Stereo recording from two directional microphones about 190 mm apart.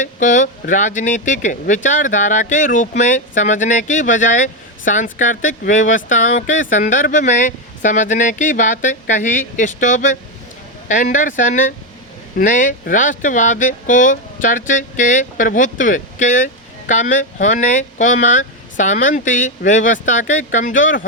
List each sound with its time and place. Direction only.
0.0 s speech: 40° left (ahead or behind)